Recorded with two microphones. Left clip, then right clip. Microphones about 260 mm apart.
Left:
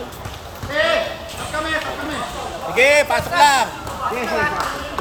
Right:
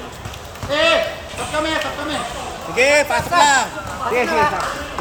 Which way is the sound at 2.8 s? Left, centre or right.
Centre.